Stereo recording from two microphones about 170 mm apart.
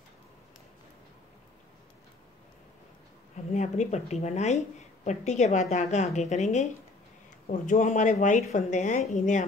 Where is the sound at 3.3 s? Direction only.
40° left (ahead or behind).